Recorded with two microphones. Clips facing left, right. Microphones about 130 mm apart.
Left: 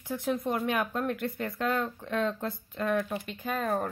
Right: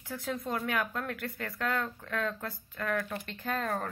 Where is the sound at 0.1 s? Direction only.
20° left (ahead or behind).